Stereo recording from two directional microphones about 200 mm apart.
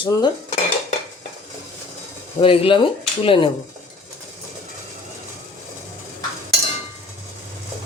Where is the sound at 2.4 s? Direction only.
25° left (ahead or behind).